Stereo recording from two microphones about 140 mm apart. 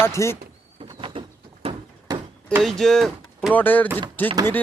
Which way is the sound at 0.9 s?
40° right (ahead or behind).